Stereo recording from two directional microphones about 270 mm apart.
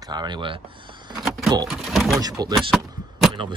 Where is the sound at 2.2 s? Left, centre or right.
Centre.